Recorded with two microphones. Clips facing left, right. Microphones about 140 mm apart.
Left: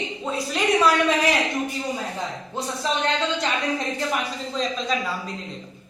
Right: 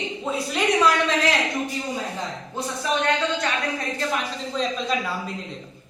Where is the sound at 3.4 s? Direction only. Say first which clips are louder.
Left 1 dB; 20° left (ahead or behind).